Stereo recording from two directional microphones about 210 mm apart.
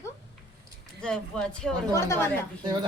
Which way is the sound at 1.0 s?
5° left (ahead or behind).